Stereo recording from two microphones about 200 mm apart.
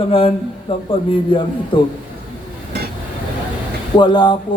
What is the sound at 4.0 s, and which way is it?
Speech, 20° left (ahead or behind).